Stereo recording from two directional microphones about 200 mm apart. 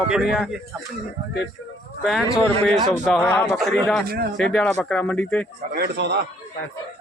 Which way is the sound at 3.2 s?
15° left (ahead or behind).